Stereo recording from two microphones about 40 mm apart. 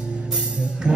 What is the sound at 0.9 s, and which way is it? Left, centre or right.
Music, right.